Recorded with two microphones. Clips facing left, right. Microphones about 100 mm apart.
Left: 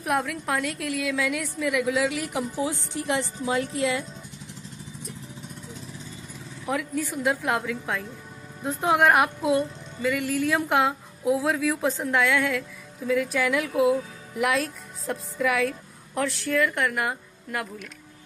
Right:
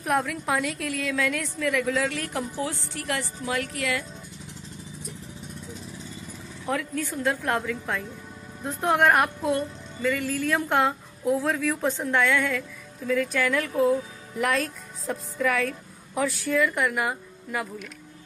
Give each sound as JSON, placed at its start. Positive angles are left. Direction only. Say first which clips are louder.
{"t": 0.0, "sound": "a woman's voice", "louder": "right 1 dB", "side_deg": 0}
{"t": 6.6, "sound": "a woman's voice", "louder": "left 1 dB", "side_deg": 10}